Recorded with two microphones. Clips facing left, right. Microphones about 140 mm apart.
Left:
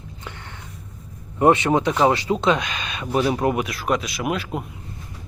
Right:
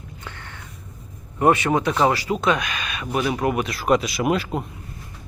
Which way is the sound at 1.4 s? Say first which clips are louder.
Left 2 dB; 20° left (ahead or behind).